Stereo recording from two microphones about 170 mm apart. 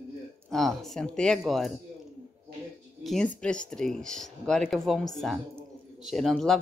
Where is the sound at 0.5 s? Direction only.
Centre (ahead or behind).